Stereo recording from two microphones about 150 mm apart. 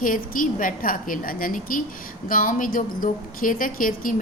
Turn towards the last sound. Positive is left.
turn(degrees=65)  # may be behind; listen again after turning